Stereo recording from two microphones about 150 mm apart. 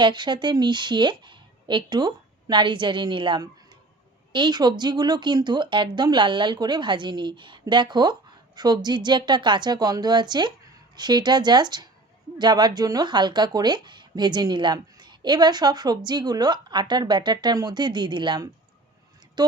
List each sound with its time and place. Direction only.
0.0 s a woman's voice: 30° right (ahead or behind)